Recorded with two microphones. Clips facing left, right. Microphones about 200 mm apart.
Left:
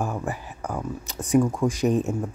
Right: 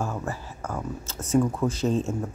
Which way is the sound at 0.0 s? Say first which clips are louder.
Left 2 dB; 15° left (ahead or behind).